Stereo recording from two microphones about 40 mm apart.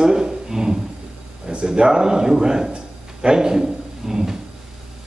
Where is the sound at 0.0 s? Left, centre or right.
Centre.